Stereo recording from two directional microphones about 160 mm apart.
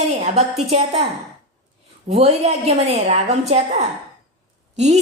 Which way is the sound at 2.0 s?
40° right (ahead or behind).